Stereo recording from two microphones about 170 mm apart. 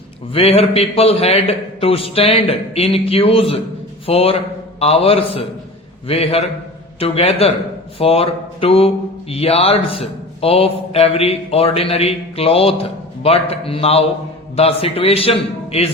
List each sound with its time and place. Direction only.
0.3 s a man's voice: 35° left (ahead or behind)